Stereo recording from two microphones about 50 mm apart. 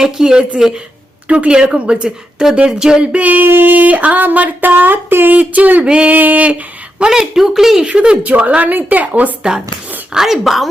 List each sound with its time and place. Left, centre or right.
0.0 s speech: centre
1.3 s speech: right
3.4 s a sound: right
5.8 s speech: right
6.1 s a sound: right
7.0 s speech: centre
7.9 s speech: right
8.2 s a sound: right
10.1 s a woman's voice: centre